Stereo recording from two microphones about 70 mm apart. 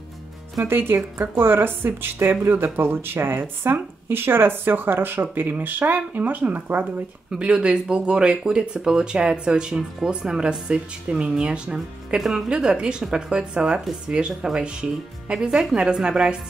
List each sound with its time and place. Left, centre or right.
0.7 s speech: right
7.3 s speech: centre